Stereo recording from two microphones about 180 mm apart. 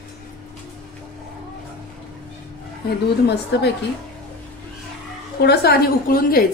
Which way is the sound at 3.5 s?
70° left (ahead or behind).